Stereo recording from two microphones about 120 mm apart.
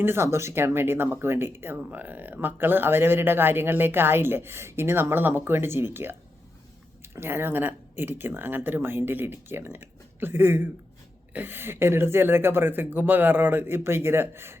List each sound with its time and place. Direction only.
0.0 s speech: 20° right (ahead or behind)